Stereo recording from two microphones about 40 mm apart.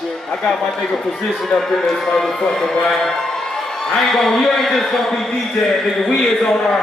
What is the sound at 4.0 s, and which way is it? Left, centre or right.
A man's voice, centre.